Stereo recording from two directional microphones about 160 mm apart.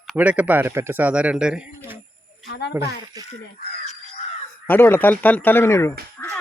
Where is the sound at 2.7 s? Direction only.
20° right (ahead or behind).